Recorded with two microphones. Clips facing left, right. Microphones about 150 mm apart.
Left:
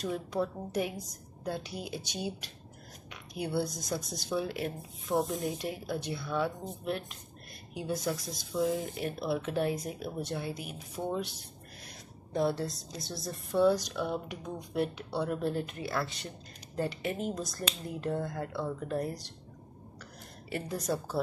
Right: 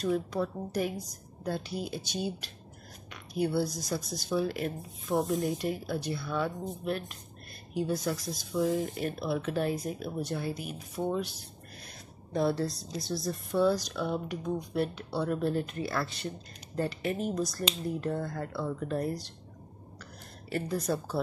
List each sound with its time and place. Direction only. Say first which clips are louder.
0.3 s speech: even; 20° left (ahead or behind)
12.3 s speech: right 2 dB; 15° left (ahead or behind)
20.5 s speech: right 2 dB; 15° left (ahead or behind)